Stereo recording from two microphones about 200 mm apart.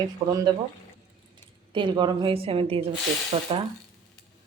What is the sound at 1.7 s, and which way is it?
A woman's voice, 25° right (ahead or behind).